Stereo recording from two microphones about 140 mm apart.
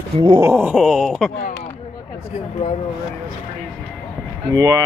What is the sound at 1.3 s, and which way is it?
Speech, 65° left (ahead or behind).